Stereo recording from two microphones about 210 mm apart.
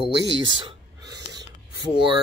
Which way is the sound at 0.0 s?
25° right (ahead or behind).